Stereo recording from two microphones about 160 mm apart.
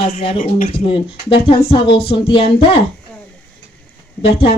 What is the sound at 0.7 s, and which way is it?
A woman's voice, 35° left (ahead or behind).